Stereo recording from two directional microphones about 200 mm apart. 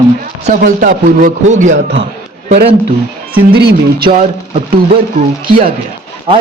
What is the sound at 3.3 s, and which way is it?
Speech, 50° right (ahead or behind).